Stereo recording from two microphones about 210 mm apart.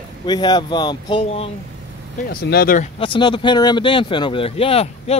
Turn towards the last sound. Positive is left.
turn(degrees=30)  # may be behind; listen again after turning